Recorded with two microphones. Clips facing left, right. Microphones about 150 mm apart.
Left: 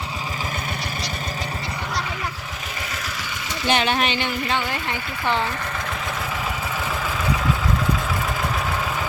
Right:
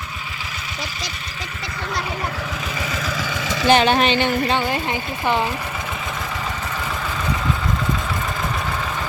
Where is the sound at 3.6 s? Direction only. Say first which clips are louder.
Right 6 dB; 35° right (ahead or behind).